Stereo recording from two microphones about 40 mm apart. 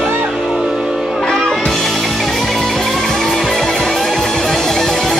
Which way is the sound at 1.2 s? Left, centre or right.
Centre.